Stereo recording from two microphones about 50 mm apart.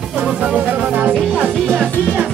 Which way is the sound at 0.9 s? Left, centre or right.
Right.